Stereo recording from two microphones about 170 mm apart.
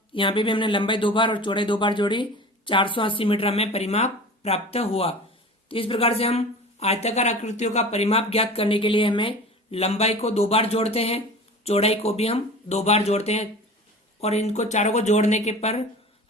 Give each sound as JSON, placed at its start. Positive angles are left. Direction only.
{"t": 0.1, "sound": "speech", "side_deg": 30}